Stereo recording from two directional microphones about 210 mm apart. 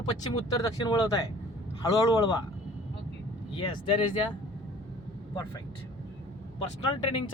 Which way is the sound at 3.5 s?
25° left (ahead or behind).